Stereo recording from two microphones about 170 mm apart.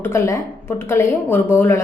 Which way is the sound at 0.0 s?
15° left (ahead or behind).